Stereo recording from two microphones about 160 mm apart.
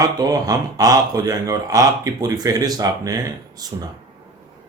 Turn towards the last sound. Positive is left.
turn(degrees=-20)  # may be behind; listen again after turning